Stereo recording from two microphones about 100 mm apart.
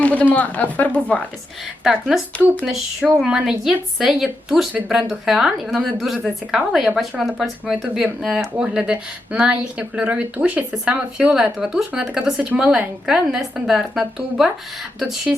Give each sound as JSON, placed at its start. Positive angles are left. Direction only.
{"t": 0.0, "sound": "speech", "side_deg": 15}
{"t": 1.8, "sound": "a woman's voice", "side_deg": -5}